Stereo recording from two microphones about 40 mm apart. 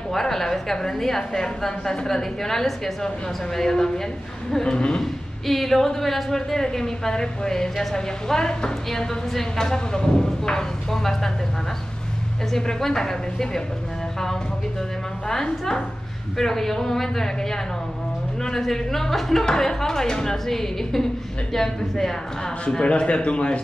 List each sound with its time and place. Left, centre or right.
0.1 s speech: centre
5.0 s speech: centre
12.4 s speech: centre
15.2 s speech: centre
22.8 s speech: left